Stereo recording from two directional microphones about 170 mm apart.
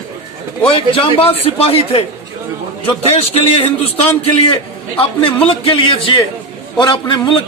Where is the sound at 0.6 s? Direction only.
30° left (ahead or behind).